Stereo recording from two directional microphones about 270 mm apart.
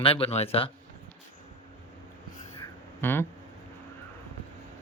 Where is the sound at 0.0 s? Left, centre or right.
Left.